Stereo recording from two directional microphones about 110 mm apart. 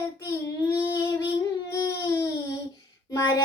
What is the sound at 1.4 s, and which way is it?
Baby cry, 30° left (ahead or behind).